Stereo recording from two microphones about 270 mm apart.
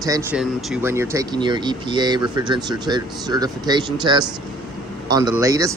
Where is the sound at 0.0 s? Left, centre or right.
Centre.